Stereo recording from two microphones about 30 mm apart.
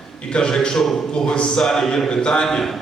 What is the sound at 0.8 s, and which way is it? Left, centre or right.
Speech, centre.